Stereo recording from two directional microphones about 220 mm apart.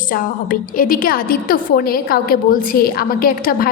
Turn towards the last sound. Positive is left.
turn(degrees=40)  # may be behind; listen again after turning